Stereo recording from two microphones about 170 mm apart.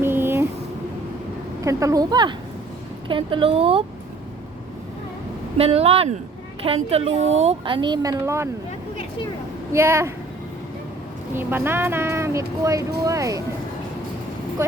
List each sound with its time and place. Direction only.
0.0 s vehicle: 15° right (ahead or behind)
1.6 s a woman's voice: 20° right (ahead or behind); by 3.8 s 35° right (ahead or behind)
5.5 s a woman's voice: 35° right (ahead or behind); by 8.4 s 20° right (ahead or behind)
9.7 s speech: 15° right (ahead or behind)
11.3 s a woman's voice: 15° right (ahead or behind)
14.6 s speech: 15° right (ahead or behind)